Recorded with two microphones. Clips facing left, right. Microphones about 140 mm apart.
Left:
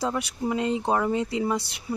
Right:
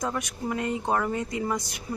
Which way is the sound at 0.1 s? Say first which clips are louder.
Left 3 dB; 20° left (ahead or behind).